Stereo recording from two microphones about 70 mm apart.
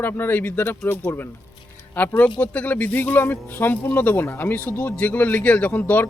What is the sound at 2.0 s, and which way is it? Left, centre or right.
Speech, left.